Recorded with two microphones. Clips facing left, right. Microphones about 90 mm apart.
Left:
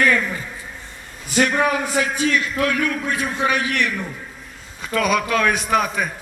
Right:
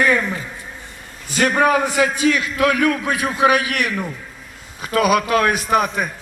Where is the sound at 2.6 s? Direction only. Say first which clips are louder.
Right 4 dB; 90° right.